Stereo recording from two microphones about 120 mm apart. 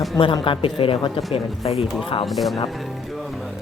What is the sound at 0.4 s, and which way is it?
Speech, 45° left (ahead or behind).